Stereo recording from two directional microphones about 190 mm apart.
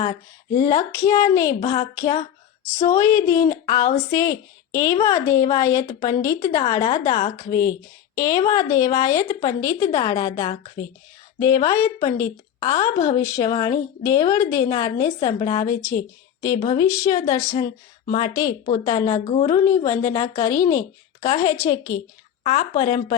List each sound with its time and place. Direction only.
0.0 s a woman's voice: 20° left (ahead or behind)